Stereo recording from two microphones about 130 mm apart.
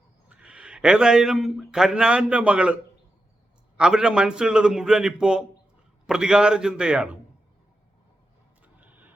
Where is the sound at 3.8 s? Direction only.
5° right (ahead or behind).